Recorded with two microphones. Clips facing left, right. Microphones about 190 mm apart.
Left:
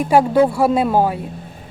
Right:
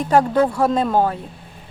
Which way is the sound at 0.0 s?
10° left (ahead or behind).